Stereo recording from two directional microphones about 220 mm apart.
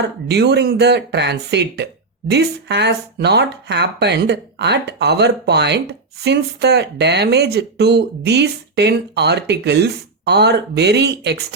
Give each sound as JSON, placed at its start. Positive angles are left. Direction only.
{"t": 0.3, "sound": "speech", "side_deg": -50}